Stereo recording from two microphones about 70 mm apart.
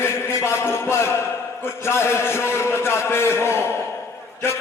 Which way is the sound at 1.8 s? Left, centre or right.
Left.